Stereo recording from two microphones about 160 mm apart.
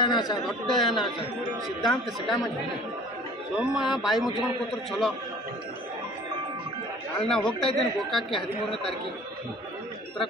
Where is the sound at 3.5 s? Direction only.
5° right (ahead or behind).